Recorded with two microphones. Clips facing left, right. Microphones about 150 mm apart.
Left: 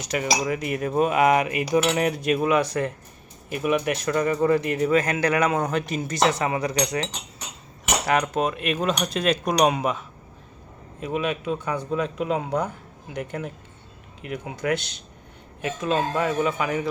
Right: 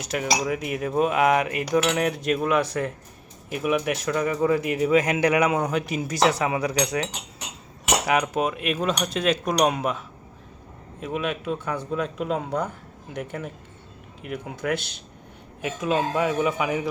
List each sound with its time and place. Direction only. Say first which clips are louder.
0.0 s cutlery: left 1 dB; centre (ahead or behind)
3.5 s speech: left 1 dB; centre (ahead or behind)
6.4 s cutlery: even; 5° right (ahead or behind)
11.0 s cutlery: left 2 dB; centre (ahead or behind)
15.6 s speech: even; 10° right (ahead or behind)